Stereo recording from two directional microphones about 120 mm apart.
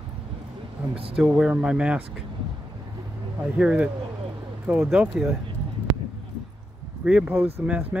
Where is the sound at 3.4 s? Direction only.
10° right (ahead or behind).